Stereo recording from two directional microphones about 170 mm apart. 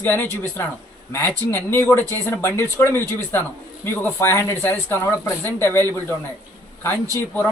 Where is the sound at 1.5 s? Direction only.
15° left (ahead or behind).